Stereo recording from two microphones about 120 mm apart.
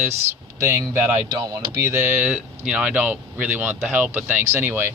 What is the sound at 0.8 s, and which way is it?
A man's voice, 20° right (ahead or behind).